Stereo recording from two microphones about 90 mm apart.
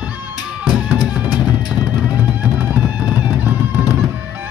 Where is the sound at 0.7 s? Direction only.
10° right (ahead or behind).